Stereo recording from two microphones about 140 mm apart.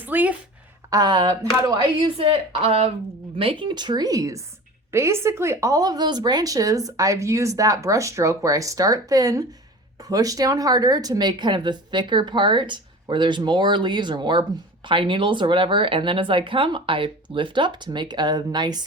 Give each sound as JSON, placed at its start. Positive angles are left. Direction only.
{"t": 0.0, "sound": "a woman's voice", "side_deg": -10}
{"t": 0.9, "sound": "speech", "side_deg": -30}